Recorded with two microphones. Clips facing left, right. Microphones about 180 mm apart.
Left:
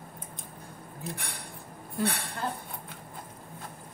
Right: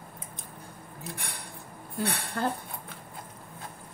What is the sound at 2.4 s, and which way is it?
Speech, 60° right (ahead or behind).